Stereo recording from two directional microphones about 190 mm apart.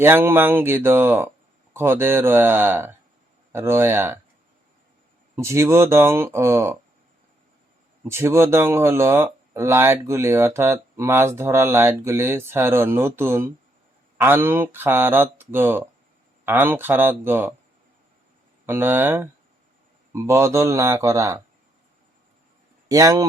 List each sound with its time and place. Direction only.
0.0 s speech: 10° right (ahead or behind)
5.4 s speech: 15° right (ahead or behind)
8.0 s speech: 15° right (ahead or behind)
18.6 s speech: 10° right (ahead or behind)
22.9 s speech: 20° right (ahead or behind)